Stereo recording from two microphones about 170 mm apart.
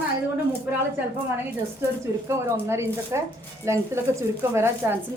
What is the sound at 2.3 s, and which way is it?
A woman's voice, 15° right (ahead or behind).